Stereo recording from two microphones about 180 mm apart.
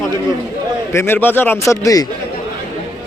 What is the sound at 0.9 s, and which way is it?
Speech, 10° left (ahead or behind).